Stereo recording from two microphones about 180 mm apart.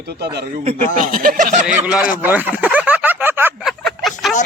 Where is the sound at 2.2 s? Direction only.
10° right (ahead or behind).